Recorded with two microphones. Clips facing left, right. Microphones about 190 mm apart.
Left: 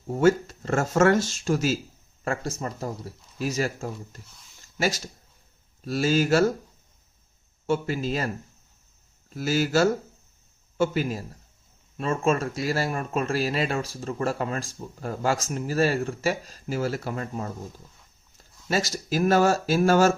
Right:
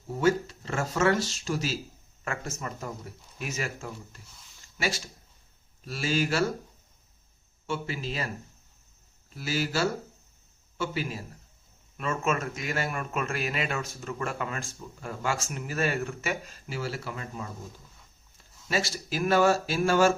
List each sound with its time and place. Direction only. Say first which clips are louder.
0.1 s speech: left 5 dB; 45° left (ahead or behind)
2.2 s speech: left 6 dB; 35° left (ahead or behind)
7.7 s speech: left 7 dB; 45° left (ahead or behind)
9.3 s speech: left 7 dB; 45° left (ahead or behind)
11.9 s speech: left 5 dB; 30° left (ahead or behind)
18.7 s speech: left 4 dB; 40° left (ahead or behind)